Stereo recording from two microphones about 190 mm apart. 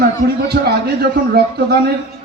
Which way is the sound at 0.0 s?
55° right (ahead or behind).